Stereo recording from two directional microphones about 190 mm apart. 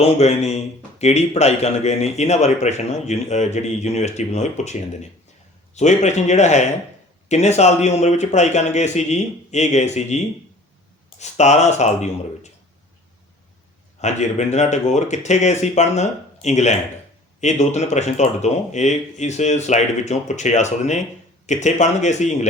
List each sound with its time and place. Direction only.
0.0 s a man's voice: 35° left (ahead or behind)
14.0 s a man's voice: 35° left (ahead or behind)